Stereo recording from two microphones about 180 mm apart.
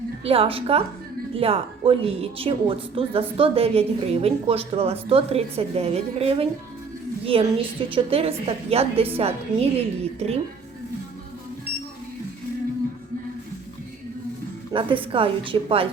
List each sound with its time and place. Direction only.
0.3 s a woman's voice: 30° right (ahead or behind)
14.7 s a woman's voice: 30° right (ahead or behind)